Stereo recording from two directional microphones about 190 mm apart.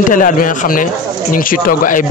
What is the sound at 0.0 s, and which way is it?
Speech, 45° left (ahead or behind).